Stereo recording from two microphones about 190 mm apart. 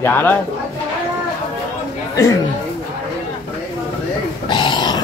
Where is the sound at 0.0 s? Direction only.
10° left (ahead or behind).